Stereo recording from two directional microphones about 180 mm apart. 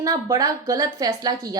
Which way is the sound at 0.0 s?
20° right (ahead or behind).